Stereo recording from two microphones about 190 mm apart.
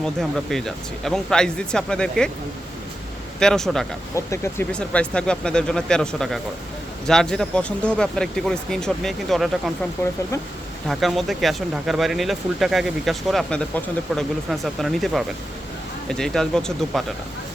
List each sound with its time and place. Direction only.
0.0 s speech: centre (ahead or behind)
3.4 s speech: 5° left (ahead or behind)
4.1 s speech: 15° left (ahead or behind)
10.8 s speech: centre (ahead or behind)